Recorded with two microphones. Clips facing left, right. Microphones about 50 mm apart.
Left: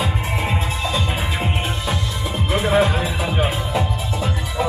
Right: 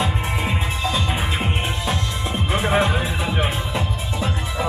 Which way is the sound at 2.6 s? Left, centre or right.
Centre.